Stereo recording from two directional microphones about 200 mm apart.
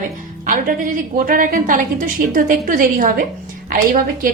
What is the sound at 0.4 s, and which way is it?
A woman's voice, 40° right (ahead or behind).